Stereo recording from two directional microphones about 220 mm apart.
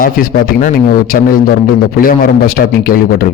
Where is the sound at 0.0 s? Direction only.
40° left (ahead or behind).